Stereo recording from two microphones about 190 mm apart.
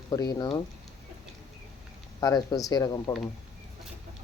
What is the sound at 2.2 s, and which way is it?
Speech, 20° left (ahead or behind).